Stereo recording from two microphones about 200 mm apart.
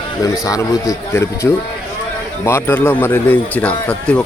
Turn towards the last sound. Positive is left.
turn(degrees=5)  # may be behind; listen again after turning